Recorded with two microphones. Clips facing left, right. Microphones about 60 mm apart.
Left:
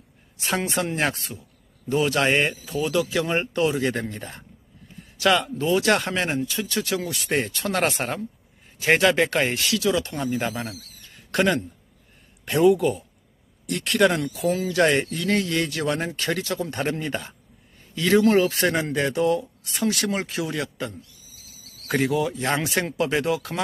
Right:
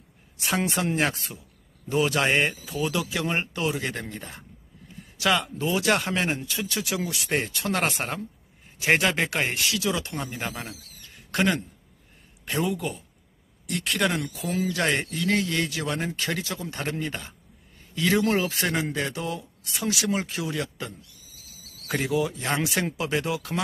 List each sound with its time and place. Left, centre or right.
0.4 s speech: centre
10.1 s speech: centre